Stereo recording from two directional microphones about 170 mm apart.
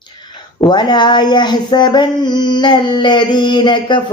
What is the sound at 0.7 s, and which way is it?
Female singing, 25° left (ahead or behind).